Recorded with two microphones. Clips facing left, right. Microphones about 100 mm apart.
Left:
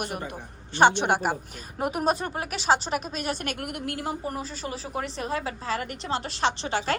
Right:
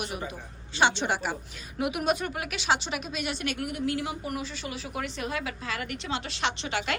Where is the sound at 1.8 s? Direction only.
40° left (ahead or behind).